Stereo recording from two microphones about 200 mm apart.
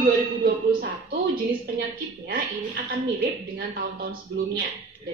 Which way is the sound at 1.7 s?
55° right (ahead or behind).